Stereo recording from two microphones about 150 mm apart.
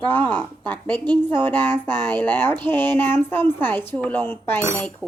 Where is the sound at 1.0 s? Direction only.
30° right (ahead or behind).